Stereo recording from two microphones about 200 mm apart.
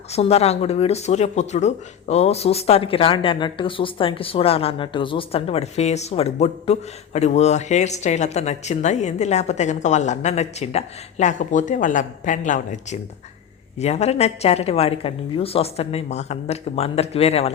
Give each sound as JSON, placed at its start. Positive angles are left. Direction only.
{"t": 0.1, "sound": "speech", "side_deg": 30}